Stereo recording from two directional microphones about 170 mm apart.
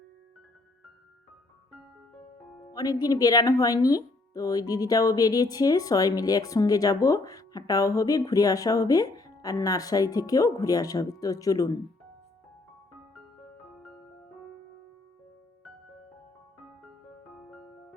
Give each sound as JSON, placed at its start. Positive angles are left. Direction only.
{"t": 2.7, "sound": "speech", "side_deg": 20}